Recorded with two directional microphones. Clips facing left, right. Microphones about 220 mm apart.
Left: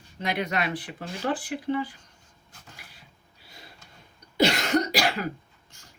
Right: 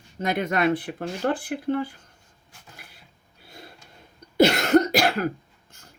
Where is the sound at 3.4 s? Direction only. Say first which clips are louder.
Right 6 dB; 55° right (ahead or behind).